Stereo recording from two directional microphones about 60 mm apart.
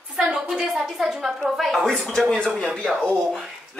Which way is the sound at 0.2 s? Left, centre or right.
Centre.